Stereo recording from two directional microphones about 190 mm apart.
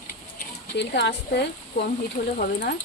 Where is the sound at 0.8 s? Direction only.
65° left (ahead or behind).